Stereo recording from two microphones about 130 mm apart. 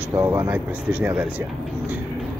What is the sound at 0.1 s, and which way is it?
Speech, 25° right (ahead or behind).